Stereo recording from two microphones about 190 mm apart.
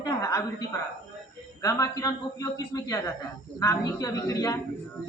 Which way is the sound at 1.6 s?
15° left (ahead or behind).